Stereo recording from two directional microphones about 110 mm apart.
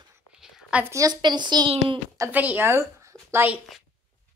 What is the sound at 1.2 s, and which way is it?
Speech, 40° right (ahead or behind).